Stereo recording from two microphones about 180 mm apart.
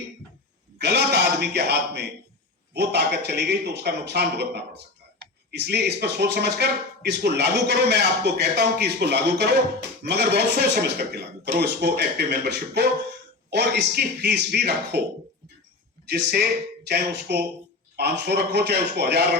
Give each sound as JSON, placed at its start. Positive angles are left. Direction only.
{"t": 0.8, "sound": "speech", "side_deg": -70}
{"t": 16.0, "sound": "speech", "side_deg": -65}